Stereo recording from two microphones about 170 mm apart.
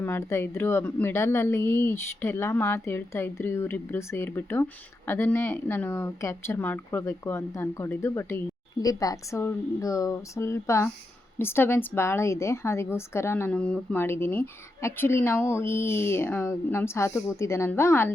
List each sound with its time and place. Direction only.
0.0 s a woman's voice: 15° left (ahead or behind)